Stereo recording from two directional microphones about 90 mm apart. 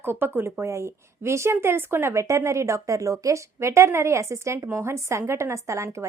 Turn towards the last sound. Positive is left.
turn(degrees=-35)  # may be behind; listen again after turning